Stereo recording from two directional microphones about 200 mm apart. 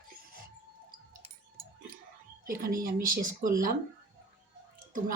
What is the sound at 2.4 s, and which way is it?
A woman's voice, 45° right (ahead or behind).